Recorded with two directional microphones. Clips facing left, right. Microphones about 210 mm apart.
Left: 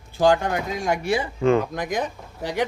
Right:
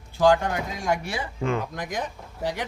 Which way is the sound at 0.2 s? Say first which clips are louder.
Left 1 dB; 20° left (ahead or behind).